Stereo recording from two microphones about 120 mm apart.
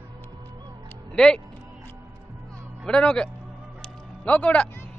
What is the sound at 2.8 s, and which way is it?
Speech, 5° left (ahead or behind).